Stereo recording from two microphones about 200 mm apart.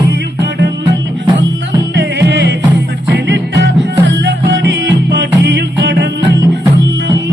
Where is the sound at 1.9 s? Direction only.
60° right (ahead or behind).